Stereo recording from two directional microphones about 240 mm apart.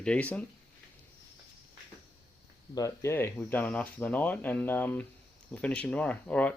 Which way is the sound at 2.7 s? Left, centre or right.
Centre.